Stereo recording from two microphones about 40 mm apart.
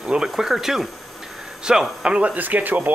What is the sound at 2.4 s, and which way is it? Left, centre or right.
Speech, right.